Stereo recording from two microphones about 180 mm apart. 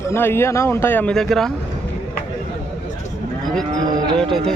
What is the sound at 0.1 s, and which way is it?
Speech, 15° left (ahead or behind).